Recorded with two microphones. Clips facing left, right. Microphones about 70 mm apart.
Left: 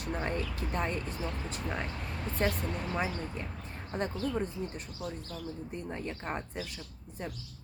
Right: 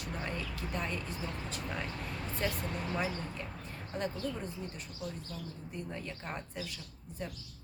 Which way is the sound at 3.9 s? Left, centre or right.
Left.